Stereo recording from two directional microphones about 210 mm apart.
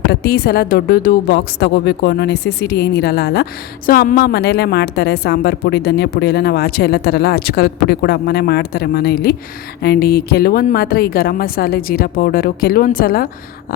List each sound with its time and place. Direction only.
0.1 s a woman's voice: 50° left (ahead or behind)